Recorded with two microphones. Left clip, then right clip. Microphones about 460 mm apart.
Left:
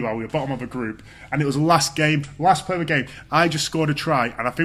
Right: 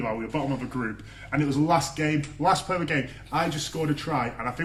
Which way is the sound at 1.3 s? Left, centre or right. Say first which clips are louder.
Left 5 dB; left.